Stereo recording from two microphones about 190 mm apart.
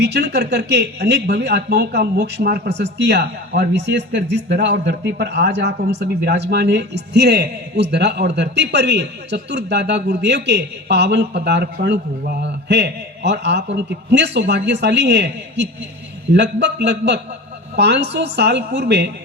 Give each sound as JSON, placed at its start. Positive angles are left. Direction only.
{"t": 0.0, "sound": "speech", "side_deg": -60}